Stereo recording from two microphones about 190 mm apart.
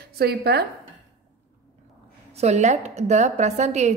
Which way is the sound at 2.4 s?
35° right (ahead or behind).